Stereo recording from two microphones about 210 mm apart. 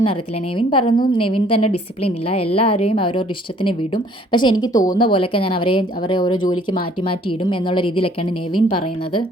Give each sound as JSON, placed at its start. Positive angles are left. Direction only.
{"t": 0.0, "sound": "a woman's voice", "side_deg": 25}